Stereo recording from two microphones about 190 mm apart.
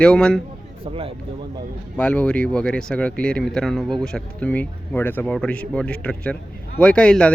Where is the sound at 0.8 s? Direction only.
30° right (ahead or behind).